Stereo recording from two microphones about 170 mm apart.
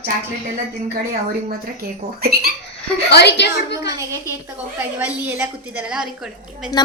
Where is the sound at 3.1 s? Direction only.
85° left.